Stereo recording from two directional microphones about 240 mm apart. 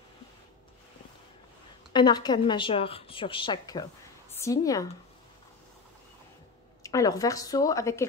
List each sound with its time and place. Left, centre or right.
1.9 s a woman's voice: centre
6.8 s a woman's voice: centre